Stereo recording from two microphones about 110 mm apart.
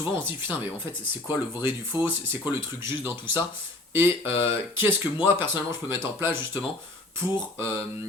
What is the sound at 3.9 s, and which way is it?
Speech, 20° right (ahead or behind).